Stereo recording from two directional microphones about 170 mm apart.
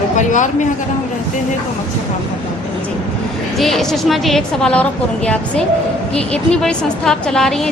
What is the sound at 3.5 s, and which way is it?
A woman's voice, centre (ahead or behind).